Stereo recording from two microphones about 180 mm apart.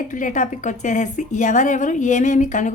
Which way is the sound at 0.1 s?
45° left (ahead or behind).